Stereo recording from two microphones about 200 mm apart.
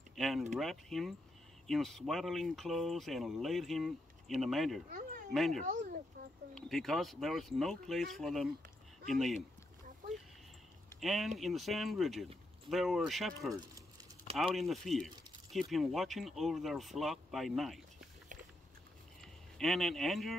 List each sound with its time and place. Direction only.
0.1 s a sound: centre (ahead or behind)
0.5 s speech: centre (ahead or behind)
5.6 s speech: 40° right (ahead or behind)
6.5 s speech: centre (ahead or behind)
11.0 s speech: centre (ahead or behind)
19.2 s speech: centre (ahead or behind)